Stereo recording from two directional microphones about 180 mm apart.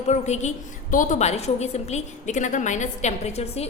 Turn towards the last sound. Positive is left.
turn(degrees=35)  # may be behind; listen again after turning